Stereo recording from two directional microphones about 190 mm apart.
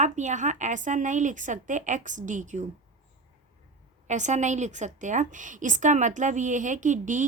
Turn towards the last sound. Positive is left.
turn(degrees=-40)  # may be behind; listen again after turning